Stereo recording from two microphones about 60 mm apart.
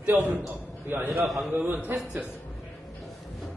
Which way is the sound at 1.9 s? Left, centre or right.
Right.